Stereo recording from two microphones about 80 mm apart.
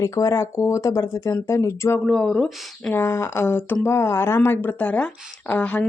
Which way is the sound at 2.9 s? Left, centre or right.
Left.